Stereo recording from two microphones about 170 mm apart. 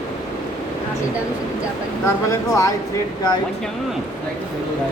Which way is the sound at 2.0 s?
20° left (ahead or behind).